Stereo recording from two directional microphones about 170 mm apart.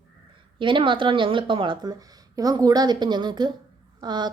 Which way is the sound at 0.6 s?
30° right (ahead or behind).